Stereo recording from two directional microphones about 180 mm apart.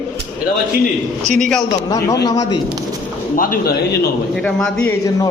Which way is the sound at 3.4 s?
50° left (ahead or behind).